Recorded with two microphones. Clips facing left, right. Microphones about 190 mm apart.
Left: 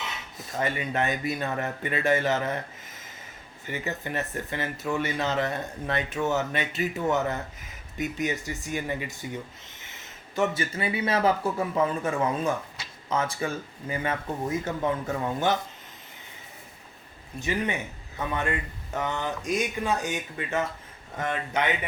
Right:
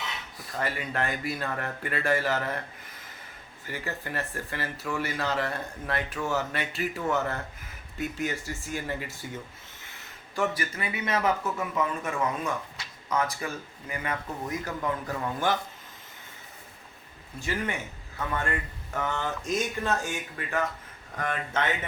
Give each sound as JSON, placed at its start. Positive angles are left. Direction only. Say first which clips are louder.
{"t": 0.3, "sound": "speech", "louder": "left 3 dB", "side_deg": 20}
{"t": 17.4, "sound": "speech", "louder": "left 3 dB", "side_deg": 20}